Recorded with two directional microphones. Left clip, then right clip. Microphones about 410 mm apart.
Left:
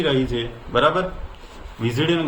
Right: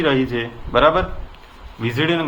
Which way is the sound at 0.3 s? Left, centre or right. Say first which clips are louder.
Right 3 dB; centre.